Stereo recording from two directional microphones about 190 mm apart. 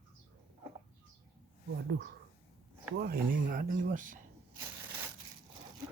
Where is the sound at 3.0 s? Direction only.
50° right (ahead or behind).